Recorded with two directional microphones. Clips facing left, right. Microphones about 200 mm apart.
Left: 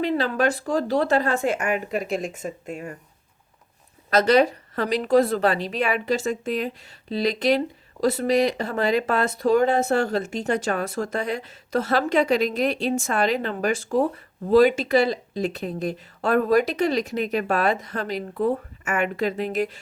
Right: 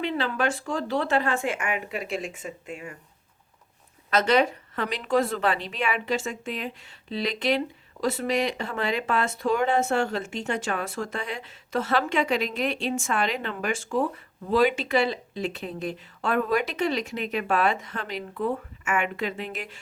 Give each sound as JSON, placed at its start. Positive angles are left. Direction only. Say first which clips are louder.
{"t": 0.0, "sound": "speech", "louder": "left 5 dB", "side_deg": 40}
{"t": 4.1, "sound": "speech", "louder": "left 4 dB", "side_deg": 35}